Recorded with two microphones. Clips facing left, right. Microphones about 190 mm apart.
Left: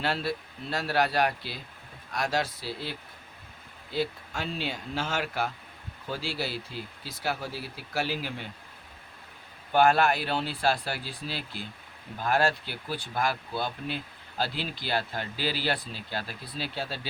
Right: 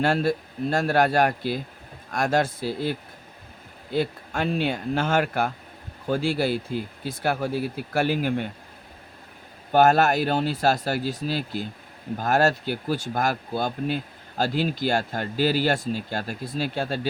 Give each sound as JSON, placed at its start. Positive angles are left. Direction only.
{"t": 0.0, "sound": "speech", "side_deg": -50}
{"t": 9.7, "sound": "speech", "side_deg": -45}